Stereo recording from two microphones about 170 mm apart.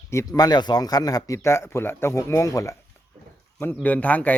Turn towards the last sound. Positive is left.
turn(degrees=10)  # may be behind; listen again after turning